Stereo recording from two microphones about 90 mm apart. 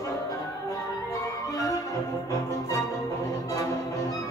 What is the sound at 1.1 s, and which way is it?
Music, 40° left (ahead or behind).